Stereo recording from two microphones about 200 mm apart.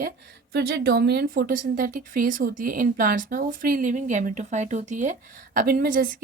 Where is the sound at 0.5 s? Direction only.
55° right (ahead or behind); by 5.1 s 40° right (ahead or behind).